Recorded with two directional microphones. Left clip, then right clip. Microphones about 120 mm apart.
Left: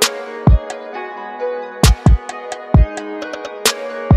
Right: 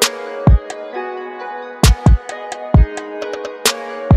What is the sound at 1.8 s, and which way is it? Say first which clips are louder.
Music: right 3 dB; centre (ahead or behind).